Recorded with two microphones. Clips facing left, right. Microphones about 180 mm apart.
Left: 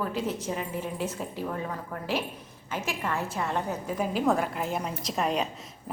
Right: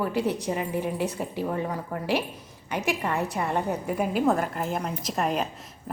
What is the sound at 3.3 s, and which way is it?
Speech, 15° right (ahead or behind).